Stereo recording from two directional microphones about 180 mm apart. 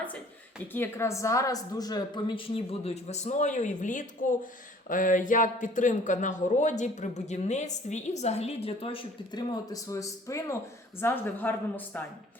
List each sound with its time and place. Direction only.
0.7 s a woman's voice: 15° left (ahead or behind)